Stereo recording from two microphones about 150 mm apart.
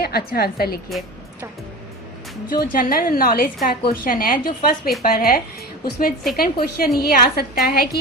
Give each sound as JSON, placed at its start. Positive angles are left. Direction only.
{"t": 0.0, "sound": "a woman's voice", "side_deg": 90}
{"t": 2.5, "sound": "a woman's voice", "side_deg": 70}
{"t": 5.8, "sound": "a woman's voice", "side_deg": 90}